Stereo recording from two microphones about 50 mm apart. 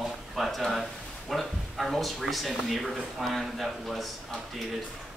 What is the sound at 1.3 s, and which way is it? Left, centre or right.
Speech, centre.